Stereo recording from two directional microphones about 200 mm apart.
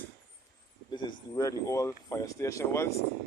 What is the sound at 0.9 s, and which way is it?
Speech, 20° left (ahead or behind).